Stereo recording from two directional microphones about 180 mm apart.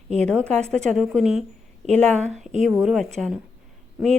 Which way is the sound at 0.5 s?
40° right (ahead or behind).